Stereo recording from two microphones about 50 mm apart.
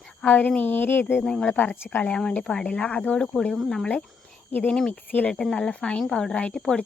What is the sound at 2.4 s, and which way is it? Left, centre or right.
Speech, centre.